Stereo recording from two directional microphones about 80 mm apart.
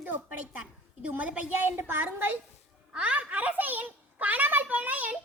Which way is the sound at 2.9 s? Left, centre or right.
Centre.